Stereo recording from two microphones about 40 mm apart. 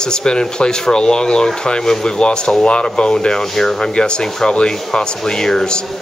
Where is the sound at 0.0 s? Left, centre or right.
Centre.